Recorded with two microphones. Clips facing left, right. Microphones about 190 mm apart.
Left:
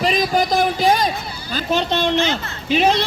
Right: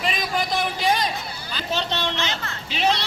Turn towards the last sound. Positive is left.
turn(degrees=50)  # may be behind; listen again after turning